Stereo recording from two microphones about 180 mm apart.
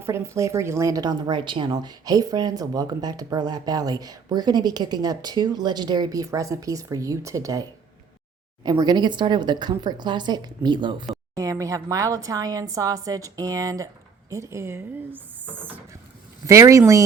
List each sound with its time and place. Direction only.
0.0 s speech: 15° right (ahead or behind)